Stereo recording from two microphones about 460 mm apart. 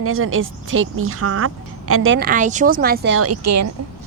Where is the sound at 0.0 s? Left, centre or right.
Right.